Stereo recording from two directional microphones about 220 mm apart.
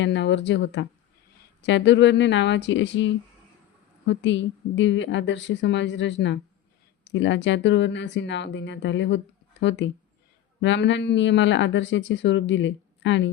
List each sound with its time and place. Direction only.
0.0 s speech: 55° left (ahead or behind)